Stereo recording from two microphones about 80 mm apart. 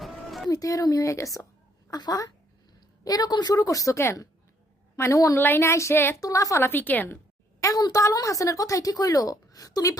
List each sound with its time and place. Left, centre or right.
0.0 s a sound: centre
0.5 s a woman's voice: left
1.9 s a woman's voice: left
5.4 s speech: left
6.1 s a woman's voice: left
6.6 s a woman's voice: left
7.6 s a woman's voice: left